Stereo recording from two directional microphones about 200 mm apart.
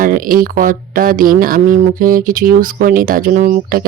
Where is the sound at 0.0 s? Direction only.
45° right (ahead or behind).